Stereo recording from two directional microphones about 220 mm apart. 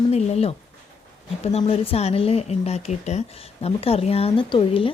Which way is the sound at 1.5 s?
25° left (ahead or behind).